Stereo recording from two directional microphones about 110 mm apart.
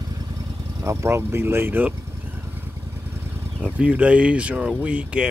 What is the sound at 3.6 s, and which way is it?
Speech, 10° right (ahead or behind).